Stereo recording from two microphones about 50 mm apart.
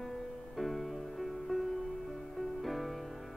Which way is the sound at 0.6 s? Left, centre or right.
Centre.